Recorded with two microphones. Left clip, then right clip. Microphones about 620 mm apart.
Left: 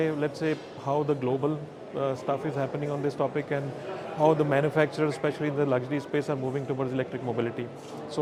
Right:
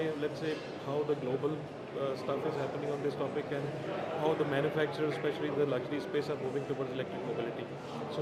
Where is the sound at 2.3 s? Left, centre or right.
Left.